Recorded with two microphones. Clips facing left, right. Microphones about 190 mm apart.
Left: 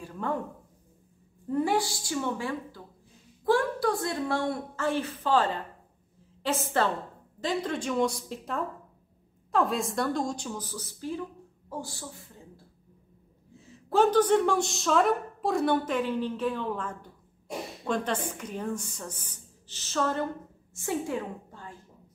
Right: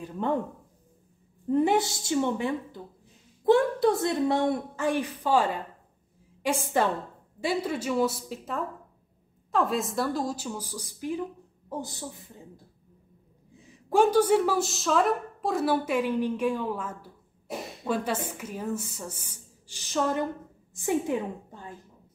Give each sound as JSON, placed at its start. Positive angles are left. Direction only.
{"t": 0.0, "sound": "a sound", "side_deg": -20}
{"t": 1.5, "sound": "a woman's voice", "side_deg": -20}
{"t": 13.6, "sound": "a woman's voice", "side_deg": -15}